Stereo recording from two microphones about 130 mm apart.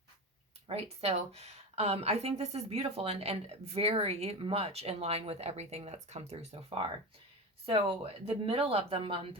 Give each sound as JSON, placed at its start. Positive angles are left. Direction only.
{"t": 0.7, "sound": "a woman's voice", "side_deg": -50}